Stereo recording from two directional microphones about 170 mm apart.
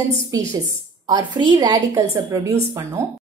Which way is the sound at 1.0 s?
25° right (ahead or behind).